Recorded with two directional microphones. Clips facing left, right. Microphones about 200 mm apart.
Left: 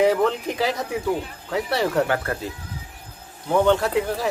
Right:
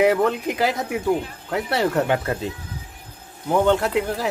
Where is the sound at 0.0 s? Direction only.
10° right (ahead or behind).